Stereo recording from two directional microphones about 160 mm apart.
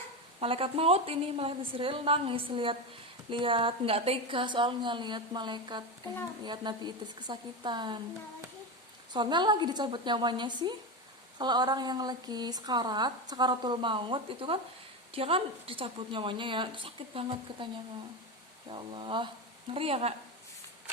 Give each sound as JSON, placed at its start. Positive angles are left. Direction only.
{"t": 0.3, "sound": "a woman's voice", "side_deg": -35}
{"t": 9.1, "sound": "a woman's voice", "side_deg": -30}
{"t": 18.7, "sound": "a woman's voice", "side_deg": -30}